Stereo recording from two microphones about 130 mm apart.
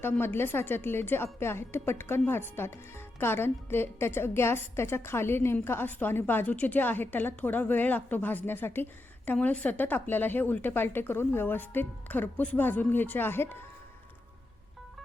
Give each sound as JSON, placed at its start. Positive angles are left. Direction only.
{"t": 0.0, "sound": "a woman's voice", "side_deg": 15}